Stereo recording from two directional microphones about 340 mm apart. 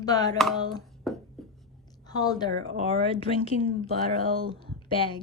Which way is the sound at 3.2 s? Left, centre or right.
Centre.